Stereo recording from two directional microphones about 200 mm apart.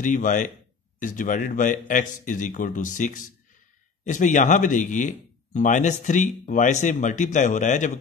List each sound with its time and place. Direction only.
0.0 s speech: 40° left (ahead or behind)